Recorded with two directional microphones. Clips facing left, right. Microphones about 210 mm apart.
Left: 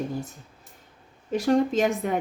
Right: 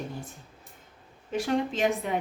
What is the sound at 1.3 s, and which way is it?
Speech, 40° left (ahead or behind).